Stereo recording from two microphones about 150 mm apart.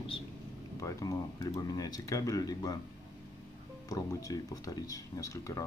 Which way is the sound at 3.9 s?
20° left (ahead or behind).